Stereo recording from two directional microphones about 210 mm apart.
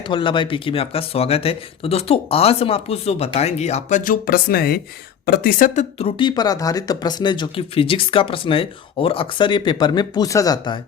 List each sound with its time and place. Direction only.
0.1 s speech: 25° left (ahead or behind)